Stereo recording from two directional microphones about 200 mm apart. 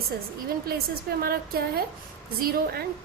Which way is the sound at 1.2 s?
50° right (ahead or behind).